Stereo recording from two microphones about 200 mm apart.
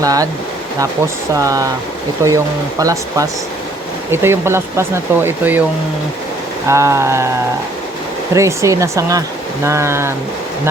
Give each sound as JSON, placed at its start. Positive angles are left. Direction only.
{"t": 0.0, "sound": "speech", "side_deg": -15}
{"t": 6.7, "sound": "speech", "side_deg": -15}